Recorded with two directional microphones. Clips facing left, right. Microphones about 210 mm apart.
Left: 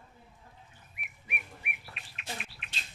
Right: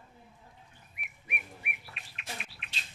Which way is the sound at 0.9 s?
Centre (ahead or behind).